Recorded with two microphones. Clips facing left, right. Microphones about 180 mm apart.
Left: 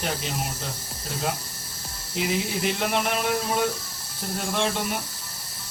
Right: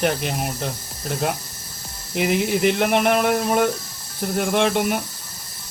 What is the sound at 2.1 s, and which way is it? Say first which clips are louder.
Speech: right 6 dB; 65° right (ahead or behind).